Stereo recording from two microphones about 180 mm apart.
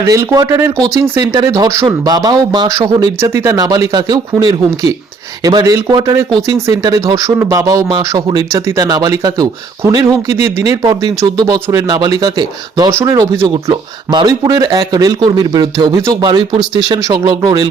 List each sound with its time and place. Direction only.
0.0 s speech: 15° right (ahead or behind)